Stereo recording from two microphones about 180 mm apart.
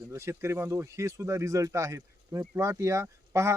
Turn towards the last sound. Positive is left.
turn(degrees=-15)  # may be behind; listen again after turning